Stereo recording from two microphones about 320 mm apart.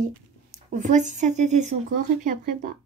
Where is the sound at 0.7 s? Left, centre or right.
Right.